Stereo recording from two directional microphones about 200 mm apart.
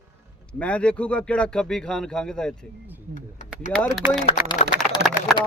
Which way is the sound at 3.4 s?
40° left (ahead or behind).